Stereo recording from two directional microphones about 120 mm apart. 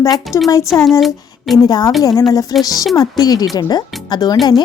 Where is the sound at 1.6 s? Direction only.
35° left (ahead or behind).